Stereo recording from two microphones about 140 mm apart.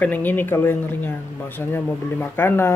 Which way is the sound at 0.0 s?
15° left (ahead or behind).